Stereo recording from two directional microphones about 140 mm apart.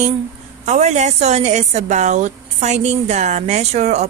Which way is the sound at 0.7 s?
55° right (ahead or behind).